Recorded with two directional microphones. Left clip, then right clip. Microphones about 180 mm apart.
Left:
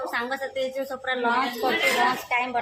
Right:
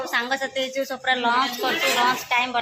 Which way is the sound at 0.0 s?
Centre (ahead or behind).